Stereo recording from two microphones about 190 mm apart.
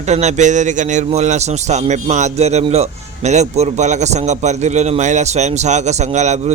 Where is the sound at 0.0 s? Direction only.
35° right (ahead or behind).